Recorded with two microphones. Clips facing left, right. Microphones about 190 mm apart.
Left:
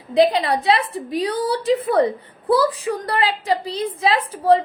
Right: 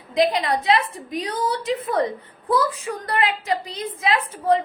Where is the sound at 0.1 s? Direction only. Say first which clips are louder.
Left 4 dB; 30° left (ahead or behind).